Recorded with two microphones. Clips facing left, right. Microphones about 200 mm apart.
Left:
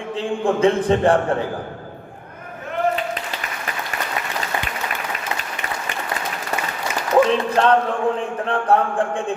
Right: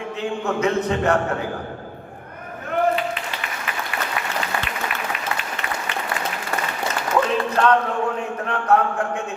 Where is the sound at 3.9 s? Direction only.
45° left (ahead or behind).